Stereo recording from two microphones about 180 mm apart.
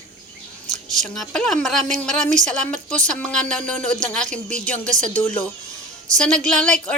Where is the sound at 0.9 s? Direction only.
Centre (ahead or behind).